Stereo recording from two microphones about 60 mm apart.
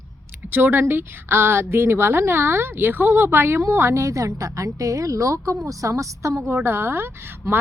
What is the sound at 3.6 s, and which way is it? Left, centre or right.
A woman's voice, right.